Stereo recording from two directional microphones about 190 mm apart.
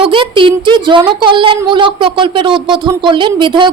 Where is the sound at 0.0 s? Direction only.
25° right (ahead or behind).